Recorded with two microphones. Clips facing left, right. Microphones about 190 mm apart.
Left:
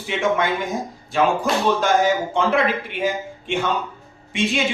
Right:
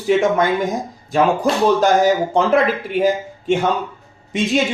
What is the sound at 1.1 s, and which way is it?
Speech, 40° right (ahead or behind).